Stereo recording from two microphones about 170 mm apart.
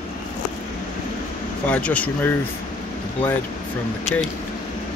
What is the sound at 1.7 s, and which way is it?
Speech, 10° left (ahead or behind).